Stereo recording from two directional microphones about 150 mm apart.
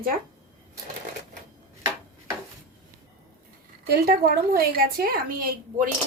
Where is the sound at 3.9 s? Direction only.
85° right.